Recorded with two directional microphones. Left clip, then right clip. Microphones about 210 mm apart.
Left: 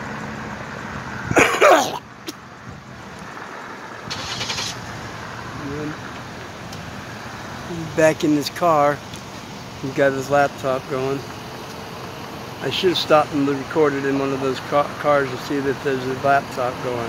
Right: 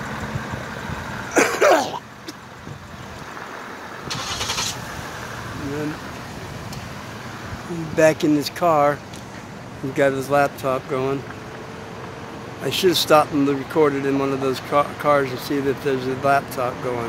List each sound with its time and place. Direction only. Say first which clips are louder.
1.3 s cough: left 3 dB; 10° left (ahead or behind)
4.1 s rub: right 1 dB; 35° right (ahead or behind)
7.9 s speech: even; centre (ahead or behind)
9.9 s speech: left 1 dB; 5° right (ahead or behind)
12.6 s speech: right 1 dB; 15° right (ahead or behind)